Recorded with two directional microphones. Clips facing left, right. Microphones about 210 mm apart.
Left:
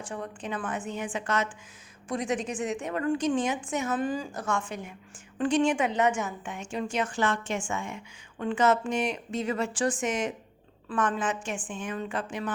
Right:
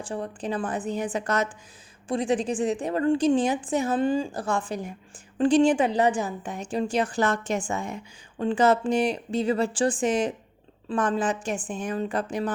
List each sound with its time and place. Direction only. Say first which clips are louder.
0.0 s a woman's voice: right 5 dB; 30° right (ahead or behind)